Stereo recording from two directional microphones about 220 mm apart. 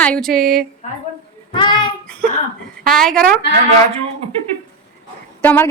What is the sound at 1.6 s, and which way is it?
Child singing, 20° left (ahead or behind).